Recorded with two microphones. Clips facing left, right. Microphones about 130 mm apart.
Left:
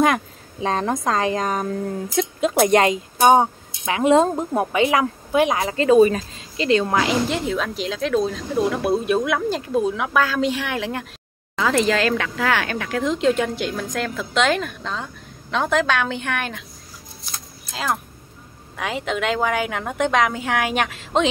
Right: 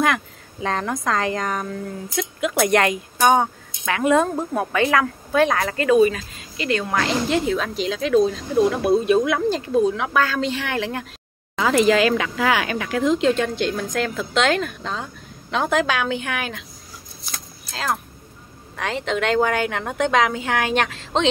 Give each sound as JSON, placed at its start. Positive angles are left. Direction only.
{"t": 0.0, "sound": "a woman's voice", "side_deg": 20}
{"t": 5.9, "sound": "speech", "side_deg": 40}
{"t": 7.2, "sound": "a woman's voice", "side_deg": 0}
{"t": 11.5, "sound": "speech", "side_deg": -10}
{"t": 13.2, "sound": "a woman's voice", "side_deg": 5}
{"t": 18.8, "sound": "a woman's voice", "side_deg": 5}